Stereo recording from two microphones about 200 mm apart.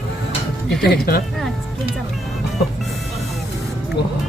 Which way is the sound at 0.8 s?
55° left (ahead or behind).